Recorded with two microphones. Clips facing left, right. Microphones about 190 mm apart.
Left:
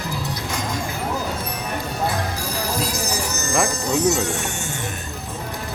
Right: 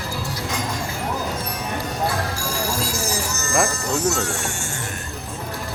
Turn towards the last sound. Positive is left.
turn(degrees=20)  # may be behind; listen again after turning